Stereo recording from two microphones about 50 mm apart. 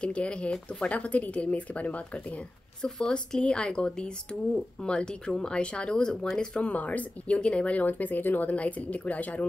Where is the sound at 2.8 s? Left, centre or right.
Centre.